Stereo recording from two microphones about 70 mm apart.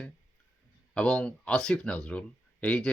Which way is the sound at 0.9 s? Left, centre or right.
Centre.